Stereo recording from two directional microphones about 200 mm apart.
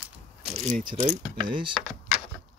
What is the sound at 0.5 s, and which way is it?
Speech, 30° right (ahead or behind).